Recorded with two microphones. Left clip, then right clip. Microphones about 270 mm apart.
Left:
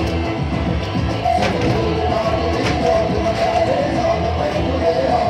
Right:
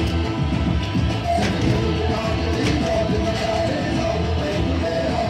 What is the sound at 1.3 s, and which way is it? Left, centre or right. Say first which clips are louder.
Music: left 3 dB; centre.